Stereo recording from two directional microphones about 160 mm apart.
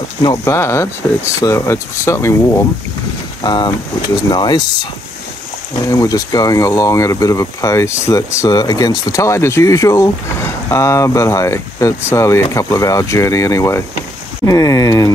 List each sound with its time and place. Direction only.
0.2 s speech: 25° left (ahead or behind)
0.6 s speech: 15° left (ahead or behind)
5.8 s speech: 20° left (ahead or behind)